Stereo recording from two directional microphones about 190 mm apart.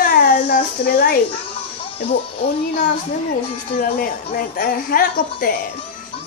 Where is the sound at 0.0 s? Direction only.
55° left (ahead or behind).